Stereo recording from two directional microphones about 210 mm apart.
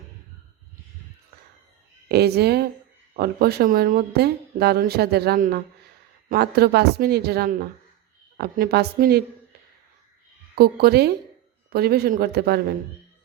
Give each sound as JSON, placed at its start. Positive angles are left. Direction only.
{"t": 2.0, "sound": "speech", "side_deg": -50}
{"t": 10.5, "sound": "speech", "side_deg": -50}